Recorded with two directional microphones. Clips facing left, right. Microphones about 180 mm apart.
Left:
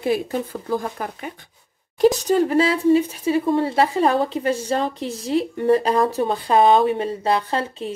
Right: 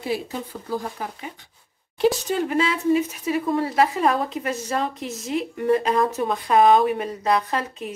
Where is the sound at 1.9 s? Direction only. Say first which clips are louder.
Left 5 dB; 40° left (ahead or behind).